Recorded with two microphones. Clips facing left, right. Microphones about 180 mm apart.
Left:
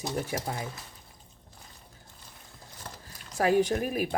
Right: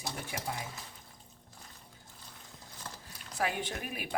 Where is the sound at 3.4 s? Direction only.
40° left (ahead or behind).